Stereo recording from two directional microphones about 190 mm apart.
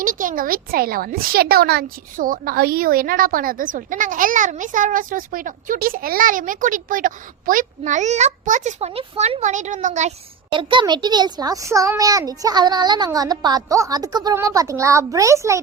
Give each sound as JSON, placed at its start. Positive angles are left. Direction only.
{"t": 0.0, "sound": "a woman's voice", "side_deg": -45}
{"t": 10.5, "sound": "a child's voice", "side_deg": -25}